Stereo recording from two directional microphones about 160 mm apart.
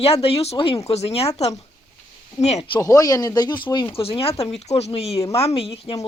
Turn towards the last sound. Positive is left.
turn(degrees=35)  # may be behind; listen again after turning